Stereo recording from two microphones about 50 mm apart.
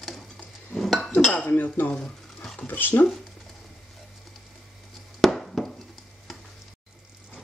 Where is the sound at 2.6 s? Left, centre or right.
Left.